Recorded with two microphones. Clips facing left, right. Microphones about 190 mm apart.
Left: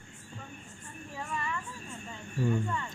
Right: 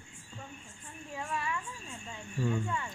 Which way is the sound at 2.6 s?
10° right (ahead or behind).